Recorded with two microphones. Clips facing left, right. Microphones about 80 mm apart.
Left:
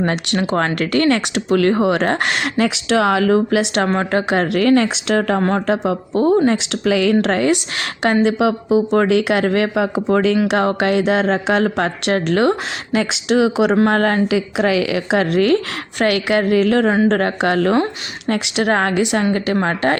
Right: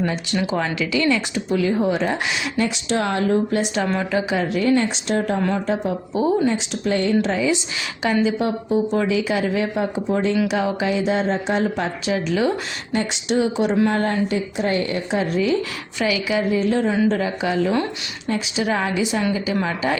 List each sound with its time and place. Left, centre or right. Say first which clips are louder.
0.0 s speech: left 4 dB; left
4.1 s speech: left 4 dB; left
5.4 s speech: left 4 dB; left
5.6 s speech: left 4 dB; left
6.2 s speech: left 5 dB; left
10.5 s speech: left 5 dB; left
13.7 s speech: left 4 dB; left
17.1 s speech: left 5 dB; left